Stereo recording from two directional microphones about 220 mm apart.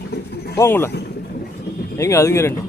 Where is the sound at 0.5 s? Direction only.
10° left (ahead or behind).